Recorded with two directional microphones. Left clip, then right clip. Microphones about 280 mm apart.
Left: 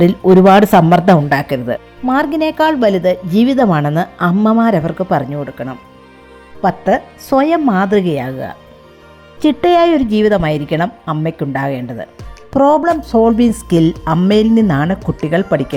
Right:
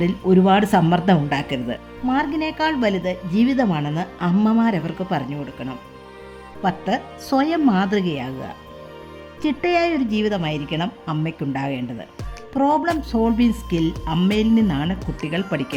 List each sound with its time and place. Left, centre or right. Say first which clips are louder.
0.0 s speech: left 10 dB; centre
6.6 s speech: left 9 dB; centre
14.9 s speech: left 10 dB; centre
15.2 s speech: left 10 dB; centre